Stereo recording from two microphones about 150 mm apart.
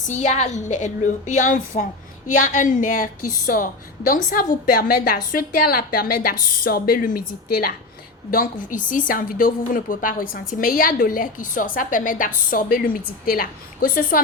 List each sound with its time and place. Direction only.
0.0 s a woman's voice: 50° left (ahead or behind); by 14.2 s 70° left (ahead or behind)